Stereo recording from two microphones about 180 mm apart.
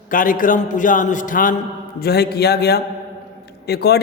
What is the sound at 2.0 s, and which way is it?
A man's voice, 60° left (ahead or behind).